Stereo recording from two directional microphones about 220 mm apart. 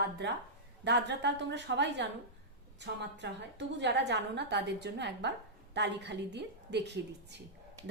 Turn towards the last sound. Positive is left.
turn(degrees=-50)  # may be behind; listen again after turning